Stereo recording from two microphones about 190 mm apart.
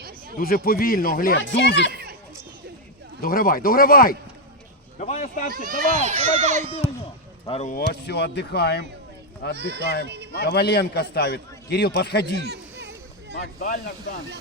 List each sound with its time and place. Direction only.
0.3 s speech: 50° left (ahead or behind)
1.4 s speech: 70° left (ahead or behind)
1.9 s chatter: 55° right (ahead or behind)
3.2 s speech: 50° left (ahead or behind)
4.9 s speech: 35° left (ahead or behind)
5.6 s speech: 40° right (ahead or behind)
7.5 s speech: 35° left (ahead or behind)
7.8 s a man's voice: 60° left (ahead or behind)
9.6 s speech: 60° right (ahead or behind)
10.4 s a man's voice: 60° left (ahead or behind)
12.4 s a sound: 65° right (ahead or behind)
13.3 s speech: 55° left (ahead or behind)